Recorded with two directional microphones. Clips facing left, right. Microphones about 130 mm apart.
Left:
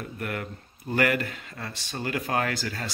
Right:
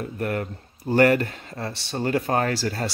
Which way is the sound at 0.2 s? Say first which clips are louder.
Right 6 dB; 35° right (ahead or behind).